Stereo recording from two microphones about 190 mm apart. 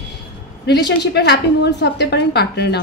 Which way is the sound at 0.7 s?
65° left (ahead or behind).